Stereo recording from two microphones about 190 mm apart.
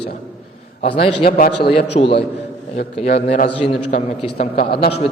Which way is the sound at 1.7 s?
30° left (ahead or behind).